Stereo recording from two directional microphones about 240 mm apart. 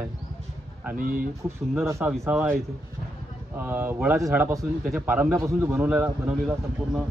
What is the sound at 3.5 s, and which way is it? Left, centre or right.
A man's voice, centre.